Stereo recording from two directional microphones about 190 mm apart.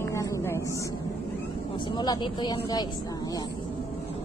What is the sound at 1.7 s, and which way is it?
Speech, 25° left (ahead or behind).